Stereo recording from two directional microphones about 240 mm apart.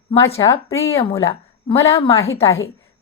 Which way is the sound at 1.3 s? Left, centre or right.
Left.